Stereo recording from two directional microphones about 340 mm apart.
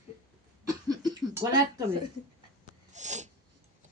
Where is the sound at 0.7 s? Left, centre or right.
Centre.